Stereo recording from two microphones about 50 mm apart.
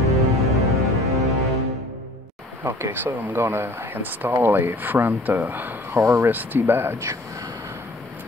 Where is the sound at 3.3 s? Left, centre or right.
Right.